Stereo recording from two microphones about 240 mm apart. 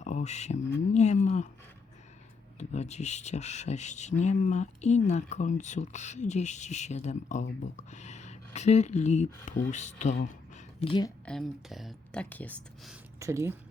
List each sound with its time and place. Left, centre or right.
0.0 s speech: left
2.6 s speech: left
11.3 s speech: centre
13.1 s speech: centre